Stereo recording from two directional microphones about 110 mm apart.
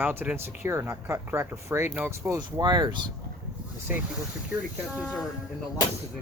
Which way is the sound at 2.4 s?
40° right (ahead or behind).